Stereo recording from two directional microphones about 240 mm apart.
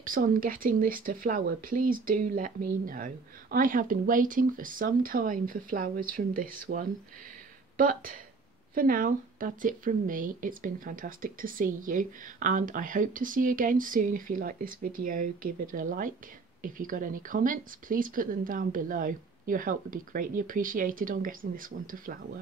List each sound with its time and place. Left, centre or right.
0.0 s a woman's voice: right